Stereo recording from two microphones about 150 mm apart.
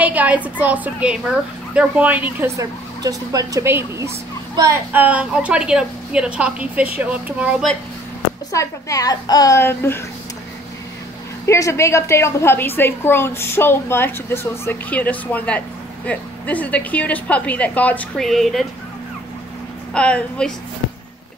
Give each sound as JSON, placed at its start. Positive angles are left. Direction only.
{"t": 0.0, "sound": "speech", "side_deg": -10}
{"t": 8.5, "sound": "a woman's voice", "side_deg": 20}
{"t": 11.4, "sound": "a woman's voice", "side_deg": 20}
{"t": 19.9, "sound": "a woman's voice", "side_deg": 5}